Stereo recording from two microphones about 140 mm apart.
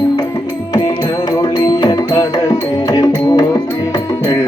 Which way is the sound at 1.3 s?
25° left (ahead or behind).